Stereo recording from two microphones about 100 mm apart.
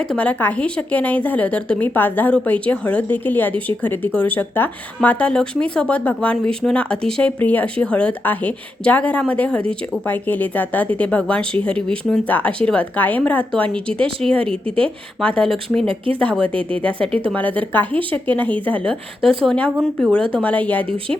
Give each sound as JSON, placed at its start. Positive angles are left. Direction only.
{"t": 0.0, "sound": "speech", "side_deg": 10}
{"t": 17.3, "sound": "speech", "side_deg": 15}